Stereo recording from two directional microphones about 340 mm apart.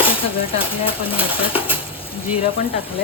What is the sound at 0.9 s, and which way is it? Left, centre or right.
Speech, centre.